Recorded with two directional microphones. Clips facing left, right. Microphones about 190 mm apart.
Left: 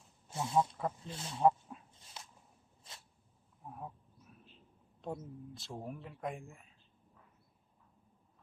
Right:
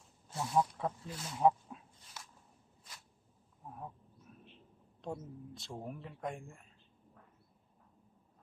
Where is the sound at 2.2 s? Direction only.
25° left (ahead or behind).